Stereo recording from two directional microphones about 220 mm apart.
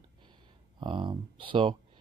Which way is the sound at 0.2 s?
20° right (ahead or behind).